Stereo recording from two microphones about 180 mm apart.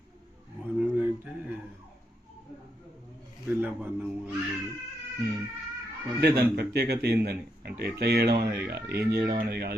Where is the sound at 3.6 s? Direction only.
10° right (ahead or behind).